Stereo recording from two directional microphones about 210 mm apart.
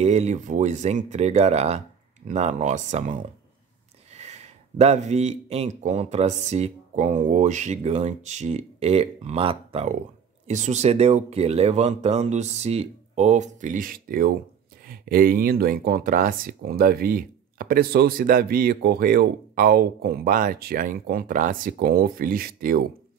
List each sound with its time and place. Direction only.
0.0 s speech: 30° right (ahead or behind)